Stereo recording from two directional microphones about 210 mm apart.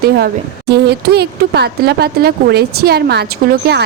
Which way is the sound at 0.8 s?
50° right (ahead or behind).